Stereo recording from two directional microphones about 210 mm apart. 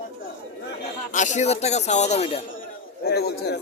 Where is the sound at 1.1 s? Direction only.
35° left (ahead or behind).